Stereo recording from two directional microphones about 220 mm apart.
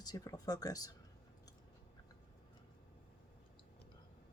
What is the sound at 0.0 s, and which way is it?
Speech, 15° left (ahead or behind).